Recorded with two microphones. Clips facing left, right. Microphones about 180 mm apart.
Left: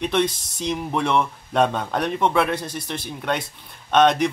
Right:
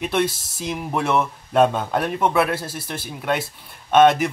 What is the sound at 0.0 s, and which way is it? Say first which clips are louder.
Speech: even; 5° right (ahead or behind).